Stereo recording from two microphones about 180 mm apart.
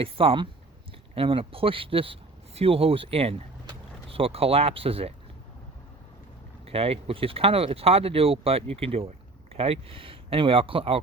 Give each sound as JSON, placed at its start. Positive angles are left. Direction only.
{"t": 0.0, "sound": "speech", "side_deg": -30}
{"t": 6.7, "sound": "speech", "side_deg": -35}